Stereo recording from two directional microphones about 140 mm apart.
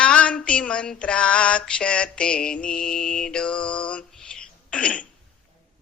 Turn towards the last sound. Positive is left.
turn(degrees=10)  # may be behind; listen again after turning